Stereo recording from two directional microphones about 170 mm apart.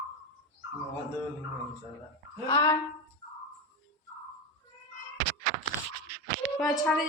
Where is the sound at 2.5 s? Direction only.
15° left (ahead or behind).